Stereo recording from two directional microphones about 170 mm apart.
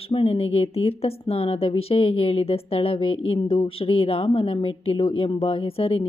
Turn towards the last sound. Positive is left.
turn(degrees=35)  # may be behind; listen again after turning